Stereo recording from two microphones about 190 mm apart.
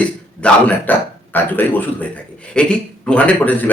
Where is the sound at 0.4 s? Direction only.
10° left (ahead or behind).